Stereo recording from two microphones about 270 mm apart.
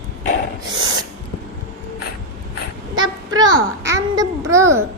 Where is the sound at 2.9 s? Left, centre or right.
Centre.